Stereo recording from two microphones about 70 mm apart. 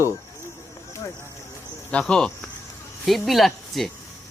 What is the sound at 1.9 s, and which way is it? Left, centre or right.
Speech, centre.